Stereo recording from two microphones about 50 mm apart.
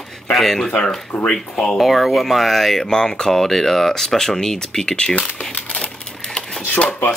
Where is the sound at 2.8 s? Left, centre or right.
Centre.